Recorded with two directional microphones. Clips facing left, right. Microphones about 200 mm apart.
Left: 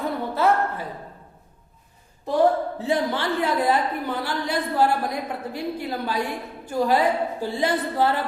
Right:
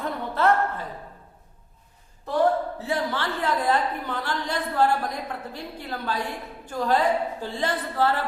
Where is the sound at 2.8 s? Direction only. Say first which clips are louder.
Left 4 dB; 15° left (ahead or behind).